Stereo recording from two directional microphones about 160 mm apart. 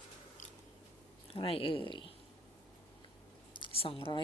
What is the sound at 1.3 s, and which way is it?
Speech, 35° left (ahead or behind).